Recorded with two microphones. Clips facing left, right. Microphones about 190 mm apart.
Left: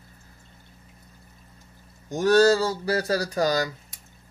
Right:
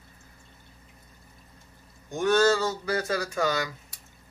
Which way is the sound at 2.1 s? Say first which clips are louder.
Left 4 dB; 35° left (ahead or behind).